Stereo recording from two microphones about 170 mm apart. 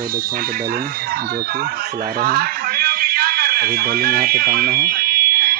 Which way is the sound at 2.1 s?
60° right (ahead or behind).